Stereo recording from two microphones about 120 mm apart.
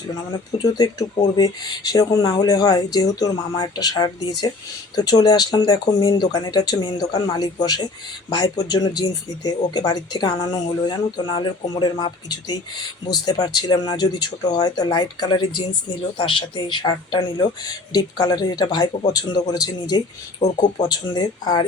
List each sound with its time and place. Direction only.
0.6 s speech: 35° left (ahead or behind)
20.4 s speech: 70° left (ahead or behind)
20.8 s speech: 35° left (ahead or behind)